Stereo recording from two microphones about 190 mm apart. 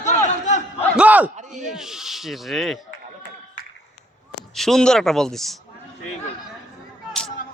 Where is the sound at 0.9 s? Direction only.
5° right (ahead or behind).